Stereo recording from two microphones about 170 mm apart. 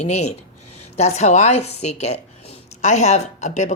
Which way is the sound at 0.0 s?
40° left (ahead or behind).